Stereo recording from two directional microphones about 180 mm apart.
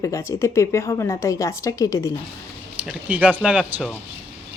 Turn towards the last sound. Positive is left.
turn(degrees=-5)  # may be behind; listen again after turning